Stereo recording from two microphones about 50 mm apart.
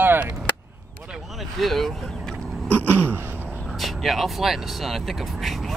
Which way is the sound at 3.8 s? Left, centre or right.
Centre.